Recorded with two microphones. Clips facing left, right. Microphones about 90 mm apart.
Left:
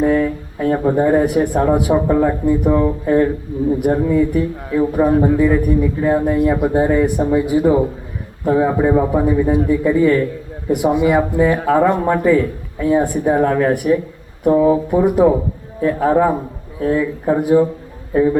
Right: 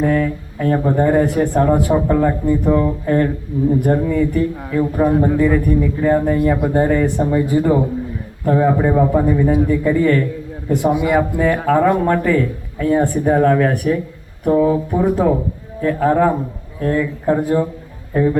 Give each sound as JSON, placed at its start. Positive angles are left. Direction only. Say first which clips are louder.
{"t": 0.0, "sound": "a man's voice", "louder": "left 2 dB", "side_deg": 20}
{"t": 10.9, "sound": "a man's voice", "louder": "left 2 dB", "side_deg": 5}